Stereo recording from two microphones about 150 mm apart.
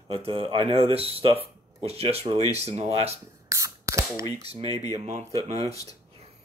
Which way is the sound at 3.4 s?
20° right (ahead or behind).